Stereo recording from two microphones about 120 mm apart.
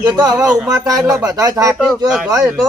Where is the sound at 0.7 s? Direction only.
30° right (ahead or behind).